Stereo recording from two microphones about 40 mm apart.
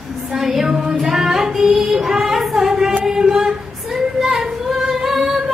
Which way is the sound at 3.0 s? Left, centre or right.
Centre.